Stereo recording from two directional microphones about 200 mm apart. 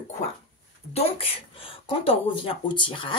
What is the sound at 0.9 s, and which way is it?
Speech, 30° left (ahead or behind).